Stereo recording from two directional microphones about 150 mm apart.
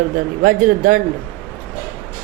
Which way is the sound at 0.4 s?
70° right (ahead or behind).